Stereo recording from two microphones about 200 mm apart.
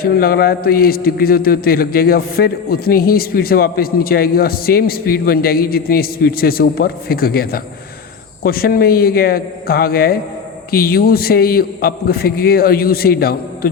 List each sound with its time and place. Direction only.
0.0 s a man's voice: 50° left (ahead or behind)